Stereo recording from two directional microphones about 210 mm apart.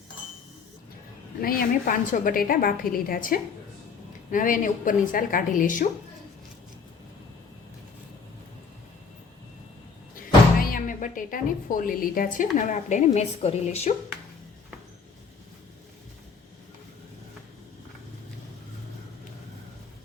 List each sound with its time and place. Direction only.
1.4 s a woman's voice: 45° left (ahead or behind)
10.6 s a woman's voice: 40° left (ahead or behind)